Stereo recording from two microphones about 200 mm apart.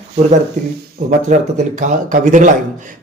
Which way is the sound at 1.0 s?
40° right (ahead or behind).